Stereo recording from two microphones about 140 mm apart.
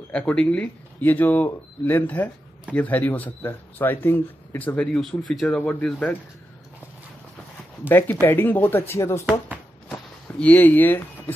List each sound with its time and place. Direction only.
0.1 s speech: 10° left (ahead or behind)
7.9 s speech: 15° left (ahead or behind)
10.4 s speech: 10° left (ahead or behind)